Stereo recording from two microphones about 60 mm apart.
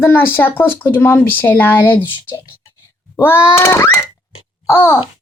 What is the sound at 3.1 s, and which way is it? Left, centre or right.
Speech, left.